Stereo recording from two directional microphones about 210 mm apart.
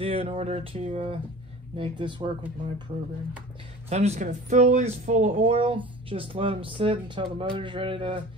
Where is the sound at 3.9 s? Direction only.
30° right (ahead or behind).